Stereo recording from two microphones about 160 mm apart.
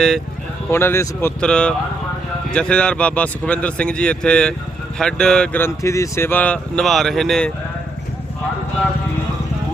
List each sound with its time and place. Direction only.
0.7 s speech: 15° left (ahead or behind)